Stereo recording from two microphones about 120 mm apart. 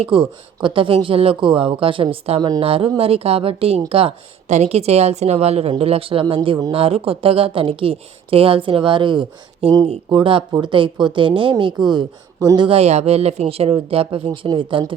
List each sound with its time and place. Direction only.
0.0 s speech: 45° right (ahead or behind)
4.4 s a woman's voice: 70° right (ahead or behind); by 11.5 s 45° right (ahead or behind)
11.9 s speech: 35° right (ahead or behind)
12.6 s speech: 55° right (ahead or behind)